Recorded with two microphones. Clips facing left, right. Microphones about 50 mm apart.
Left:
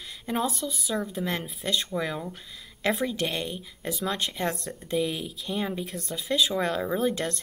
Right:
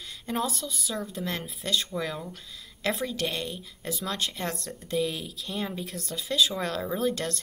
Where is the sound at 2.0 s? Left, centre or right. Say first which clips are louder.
Left 2 dB; centre.